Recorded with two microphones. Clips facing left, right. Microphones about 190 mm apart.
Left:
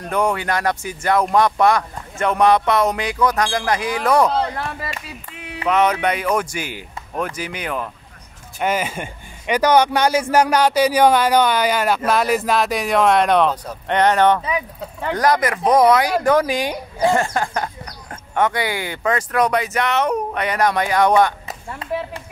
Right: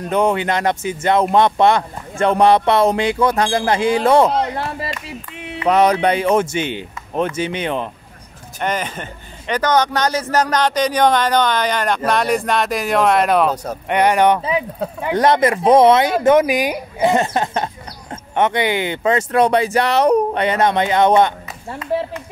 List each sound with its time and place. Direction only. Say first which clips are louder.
0.1 s speech: right 3 dB; 20° right (ahead or behind)
4.6 s a sound: right 3 dB; 25° right (ahead or behind)
5.0 s clapping: right 4 dB; 25° right (ahead or behind)
5.7 s speech: right 4 dB; 35° right (ahead or behind)
8.5 s speech: left 1 dB; 10° left (ahead or behind); by 14.4 s 15° right (ahead or behind)
15.1 s speech: right 4 dB; 25° right (ahead or behind)